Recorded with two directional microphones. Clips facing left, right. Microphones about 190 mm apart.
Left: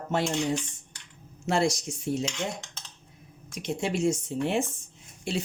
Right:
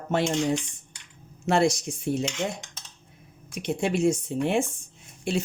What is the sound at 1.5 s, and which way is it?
Speech, 55° right (ahead or behind).